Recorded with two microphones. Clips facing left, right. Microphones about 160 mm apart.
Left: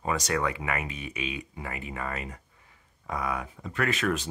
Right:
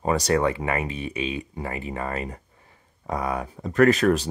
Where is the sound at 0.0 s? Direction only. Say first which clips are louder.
Right 7 dB; 35° right (ahead or behind).